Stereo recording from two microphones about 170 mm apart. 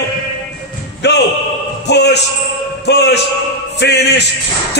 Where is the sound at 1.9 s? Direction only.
80° left.